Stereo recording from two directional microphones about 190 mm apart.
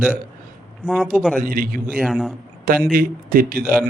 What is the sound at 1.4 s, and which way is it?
Speech, 50° right (ahead or behind).